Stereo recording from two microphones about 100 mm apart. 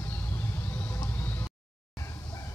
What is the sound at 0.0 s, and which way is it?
Vehicle, 20° left (ahead or behind).